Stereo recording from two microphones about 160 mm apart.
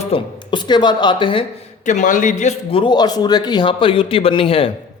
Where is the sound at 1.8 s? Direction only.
50° left (ahead or behind); by 4.7 s 35° left (ahead or behind).